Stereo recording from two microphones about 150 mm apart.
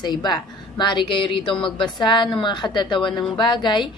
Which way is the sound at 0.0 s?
30° left (ahead or behind).